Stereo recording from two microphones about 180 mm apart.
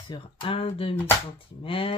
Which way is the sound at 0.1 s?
30° left (ahead or behind).